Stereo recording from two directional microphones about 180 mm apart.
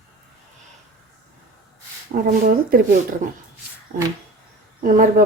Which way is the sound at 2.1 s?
45° right (ahead or behind).